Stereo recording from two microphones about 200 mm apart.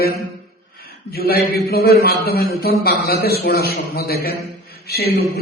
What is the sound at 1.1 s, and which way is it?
A man's voice, 50° left (ahead or behind).